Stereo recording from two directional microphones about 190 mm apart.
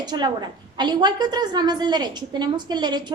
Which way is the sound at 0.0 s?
25° right (ahead or behind).